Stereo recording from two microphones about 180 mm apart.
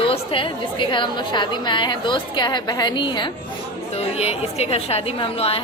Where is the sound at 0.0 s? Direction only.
30° left (ahead or behind).